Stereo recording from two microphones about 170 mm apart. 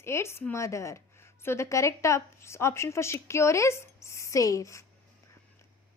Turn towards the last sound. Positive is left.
turn(degrees=15)  # may be behind; listen again after turning